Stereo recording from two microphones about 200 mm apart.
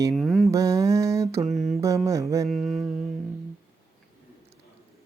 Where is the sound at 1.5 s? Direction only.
Centre (ahead or behind).